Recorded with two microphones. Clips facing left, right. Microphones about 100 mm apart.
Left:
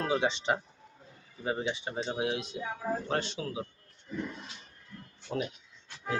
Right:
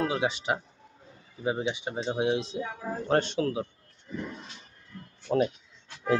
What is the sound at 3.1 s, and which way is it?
Speech, 55° right (ahead or behind).